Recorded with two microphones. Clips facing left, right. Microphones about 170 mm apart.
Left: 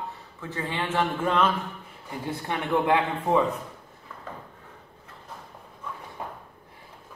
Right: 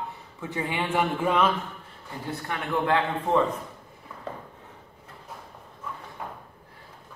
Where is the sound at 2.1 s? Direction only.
20° left (ahead or behind).